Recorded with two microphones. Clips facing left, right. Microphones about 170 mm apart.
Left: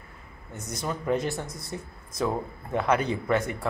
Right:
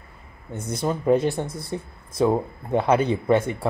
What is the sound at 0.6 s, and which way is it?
Speech, 30° right (ahead or behind).